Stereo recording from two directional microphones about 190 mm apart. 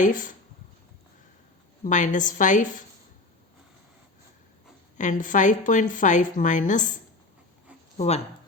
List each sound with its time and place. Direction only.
0.0 s speech: 45° left (ahead or behind)
1.8 s speech: 40° left (ahead or behind)
4.9 s speech: 40° left (ahead or behind)
7.9 s speech: 35° left (ahead or behind)